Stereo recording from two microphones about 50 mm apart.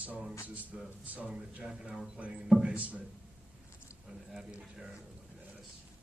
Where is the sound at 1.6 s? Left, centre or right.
Centre.